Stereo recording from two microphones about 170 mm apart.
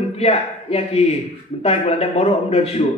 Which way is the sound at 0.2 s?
35° left (ahead or behind).